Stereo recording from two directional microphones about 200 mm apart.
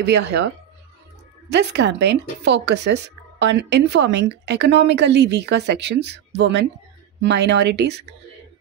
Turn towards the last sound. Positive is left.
turn(degrees=-55)  # may be behind; listen again after turning